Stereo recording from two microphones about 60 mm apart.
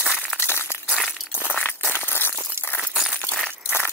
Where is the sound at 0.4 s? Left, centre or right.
Left.